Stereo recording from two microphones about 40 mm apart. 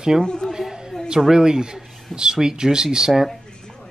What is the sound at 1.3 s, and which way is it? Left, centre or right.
Speech, centre.